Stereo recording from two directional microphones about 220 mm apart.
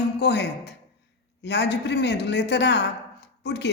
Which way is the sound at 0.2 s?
50° left (ahead or behind).